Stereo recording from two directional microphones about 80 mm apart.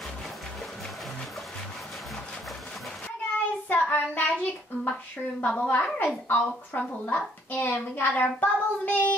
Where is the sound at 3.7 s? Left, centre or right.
Centre.